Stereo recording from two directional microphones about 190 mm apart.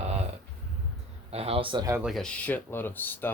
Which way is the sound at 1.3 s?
30° right (ahead or behind).